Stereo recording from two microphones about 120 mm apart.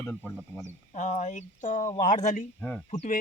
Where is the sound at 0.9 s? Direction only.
85° left.